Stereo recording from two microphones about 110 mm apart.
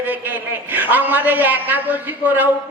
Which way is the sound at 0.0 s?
15° right (ahead or behind).